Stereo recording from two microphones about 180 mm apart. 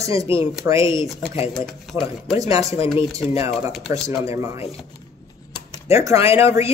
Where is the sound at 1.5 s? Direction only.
Centre (ahead or behind).